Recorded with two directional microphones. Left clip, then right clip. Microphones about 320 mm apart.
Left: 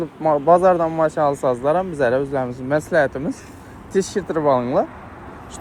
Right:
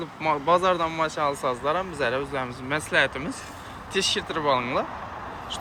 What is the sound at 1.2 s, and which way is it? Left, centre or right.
Speech, left.